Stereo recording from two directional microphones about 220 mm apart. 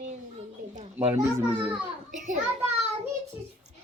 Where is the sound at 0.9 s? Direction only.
10° right (ahead or behind).